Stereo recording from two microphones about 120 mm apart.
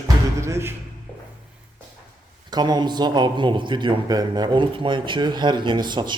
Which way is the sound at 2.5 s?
35° right (ahead or behind).